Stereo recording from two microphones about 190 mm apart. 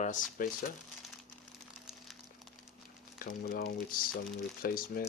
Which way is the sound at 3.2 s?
50° left (ahead or behind).